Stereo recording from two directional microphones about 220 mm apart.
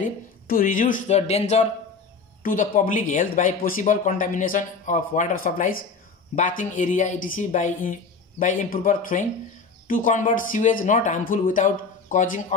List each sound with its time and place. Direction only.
0.5 s speech: 40° left (ahead or behind)